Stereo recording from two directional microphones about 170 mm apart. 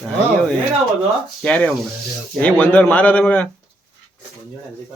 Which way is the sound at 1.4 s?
5° left (ahead or behind).